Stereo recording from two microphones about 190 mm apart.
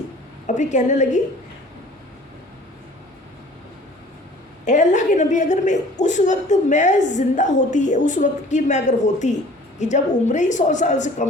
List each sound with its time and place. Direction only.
0.4 s a woman's voice: 40° left (ahead or behind)
4.6 s a woman's voice: 40° left (ahead or behind)